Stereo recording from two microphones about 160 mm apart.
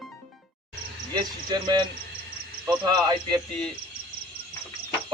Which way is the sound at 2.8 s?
25° right (ahead or behind).